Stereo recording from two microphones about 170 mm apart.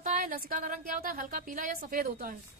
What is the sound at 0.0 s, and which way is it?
Speech, 55° right (ahead or behind).